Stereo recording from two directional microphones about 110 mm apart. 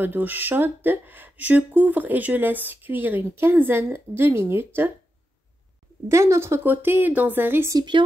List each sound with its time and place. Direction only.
0.0 s speech: 15° right (ahead or behind)
6.0 s a woman's voice: 25° right (ahead or behind)
7.7 s a woman's voice: 45° right (ahead or behind)